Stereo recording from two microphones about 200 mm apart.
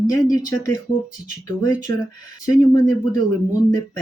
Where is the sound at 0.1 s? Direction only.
20° left (ahead or behind).